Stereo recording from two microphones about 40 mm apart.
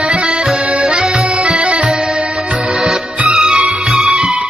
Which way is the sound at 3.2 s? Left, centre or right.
Right.